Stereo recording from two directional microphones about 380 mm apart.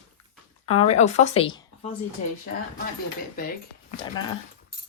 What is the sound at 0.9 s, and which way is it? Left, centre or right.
A woman's voice, centre.